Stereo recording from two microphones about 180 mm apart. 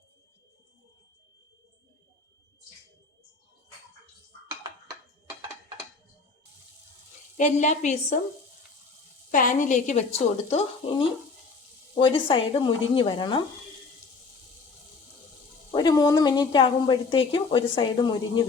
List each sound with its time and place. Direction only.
4.6 s a sound: 20° right (ahead or behind)
7.3 s a woman's voice: 40° left (ahead or behind)
9.3 s a woman's voice: 50° left (ahead or behind)
11.9 s speech: 30° left (ahead or behind)
15.7 s speech: 25° left (ahead or behind)